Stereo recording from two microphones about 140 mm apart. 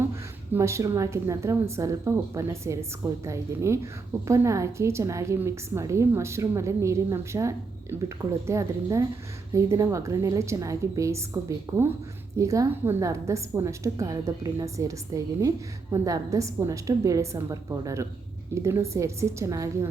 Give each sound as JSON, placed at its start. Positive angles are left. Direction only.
{"t": 0.5, "sound": "a woman's voice", "side_deg": -20}